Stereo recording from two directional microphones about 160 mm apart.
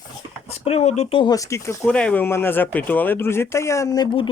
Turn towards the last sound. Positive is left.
turn(degrees=25)  # may be behind; listen again after turning